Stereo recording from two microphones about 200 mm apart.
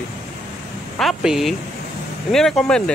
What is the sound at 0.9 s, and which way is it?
Speech, centre (ahead or behind).